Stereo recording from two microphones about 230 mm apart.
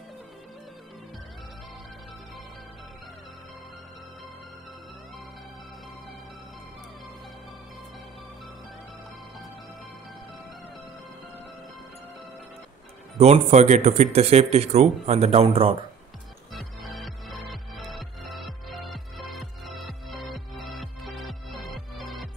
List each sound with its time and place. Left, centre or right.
13.2 s speech: right
16.5 s music: centre